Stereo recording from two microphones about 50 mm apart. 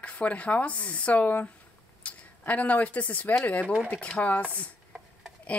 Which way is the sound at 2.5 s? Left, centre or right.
Left.